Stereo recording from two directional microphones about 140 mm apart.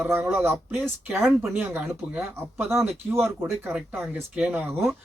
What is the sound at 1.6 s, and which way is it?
A man's voice, 15° right (ahead or behind).